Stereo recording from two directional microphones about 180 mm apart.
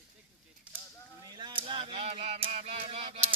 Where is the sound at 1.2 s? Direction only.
25° right (ahead or behind).